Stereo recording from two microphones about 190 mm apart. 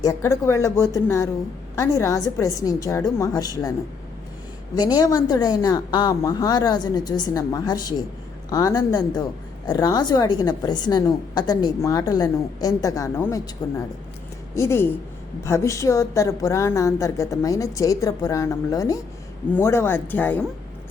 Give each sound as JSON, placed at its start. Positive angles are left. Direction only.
{"t": 0.0, "sound": "a woman's voice", "side_deg": 15}
{"t": 4.8, "sound": "a woman's voice", "side_deg": 20}